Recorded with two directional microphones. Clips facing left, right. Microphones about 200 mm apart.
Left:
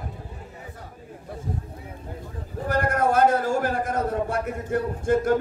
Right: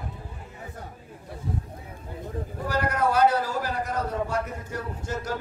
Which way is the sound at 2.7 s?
50° left (ahead or behind).